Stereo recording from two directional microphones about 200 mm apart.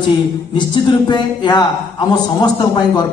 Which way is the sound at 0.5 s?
20° left (ahead or behind).